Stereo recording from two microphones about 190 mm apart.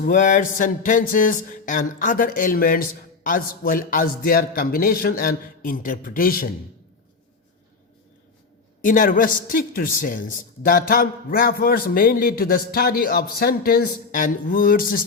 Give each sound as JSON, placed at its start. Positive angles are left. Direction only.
{"t": 0.0, "sound": "a man's voice", "side_deg": 45}
{"t": 8.8, "sound": "a man's voice", "side_deg": 45}